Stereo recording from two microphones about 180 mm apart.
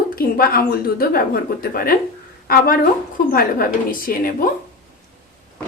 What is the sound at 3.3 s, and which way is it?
A woman's voice, 55° left (ahead or behind).